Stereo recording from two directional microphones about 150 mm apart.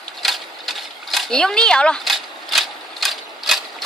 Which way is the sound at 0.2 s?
Centre (ahead or behind).